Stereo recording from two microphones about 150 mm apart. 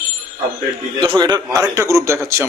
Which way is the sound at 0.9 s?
30° right (ahead or behind).